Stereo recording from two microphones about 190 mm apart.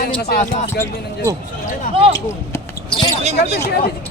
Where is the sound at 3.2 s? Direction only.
35° right (ahead or behind).